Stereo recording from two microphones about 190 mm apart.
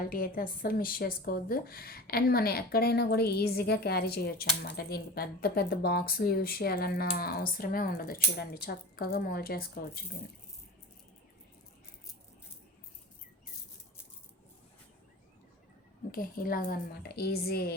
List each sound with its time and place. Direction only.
0.0 s speech: 50° left (ahead or behind)
16.1 s speech: 50° left (ahead or behind)